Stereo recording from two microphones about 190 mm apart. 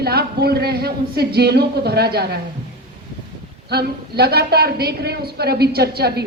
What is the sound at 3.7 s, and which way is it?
A woman's voice, 55° right (ahead or behind).